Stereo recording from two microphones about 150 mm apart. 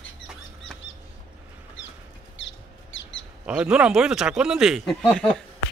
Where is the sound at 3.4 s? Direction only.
5° right (ahead or behind).